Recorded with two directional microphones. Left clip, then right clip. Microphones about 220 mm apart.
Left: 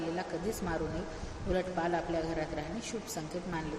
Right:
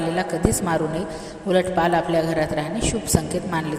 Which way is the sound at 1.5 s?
40° right (ahead or behind).